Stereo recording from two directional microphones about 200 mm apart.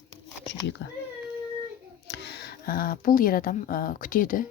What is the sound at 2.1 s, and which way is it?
Speech, 55° left (ahead or behind).